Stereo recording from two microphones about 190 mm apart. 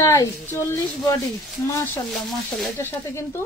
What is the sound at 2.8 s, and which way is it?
Speech, 15° left (ahead or behind).